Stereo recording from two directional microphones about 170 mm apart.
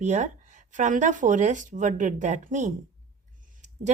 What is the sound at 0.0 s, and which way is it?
Speech, 45° right (ahead or behind).